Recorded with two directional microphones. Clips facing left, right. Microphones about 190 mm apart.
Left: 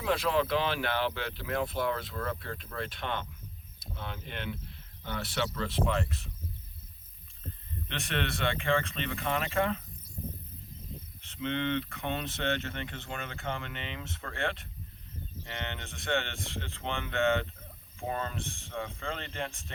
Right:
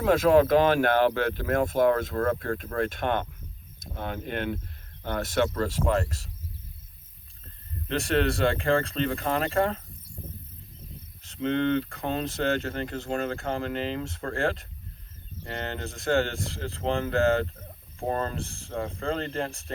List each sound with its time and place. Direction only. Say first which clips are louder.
0.0 s speech: right 9 dB; 50° right (ahead or behind)
7.9 s speech: right 10 dB; 35° right (ahead or behind)
11.2 s speech: right 7 dB; 40° right (ahead or behind)